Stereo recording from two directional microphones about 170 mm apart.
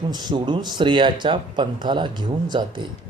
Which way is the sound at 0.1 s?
25° right (ahead or behind).